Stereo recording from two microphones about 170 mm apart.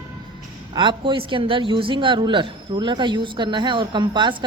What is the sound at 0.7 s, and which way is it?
A woman's voice, 30° right (ahead or behind).